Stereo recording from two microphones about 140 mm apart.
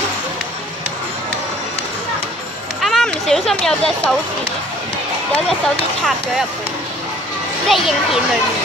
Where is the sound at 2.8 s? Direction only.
Centre (ahead or behind).